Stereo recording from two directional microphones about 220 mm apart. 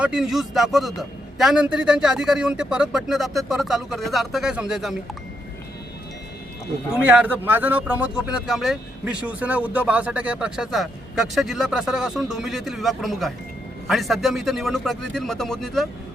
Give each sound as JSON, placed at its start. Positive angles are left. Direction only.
{"t": 0.0, "sound": "speech", "side_deg": -5}
{"t": 7.1, "sound": "speech", "side_deg": -5}